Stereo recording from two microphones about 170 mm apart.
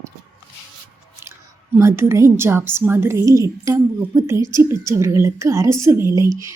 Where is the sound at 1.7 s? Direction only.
15° right (ahead or behind).